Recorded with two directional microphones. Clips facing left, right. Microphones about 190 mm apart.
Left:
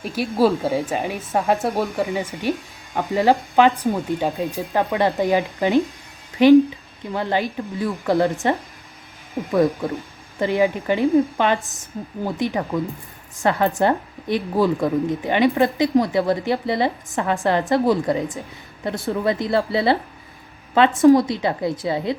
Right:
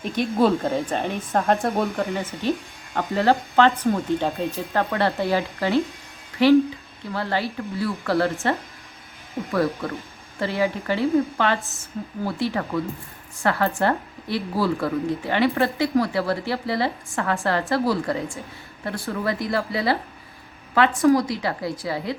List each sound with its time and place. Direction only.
0.0 s a woman's voice: 5° left (ahead or behind)
2.1 s a woman's voice: 10° left (ahead or behind)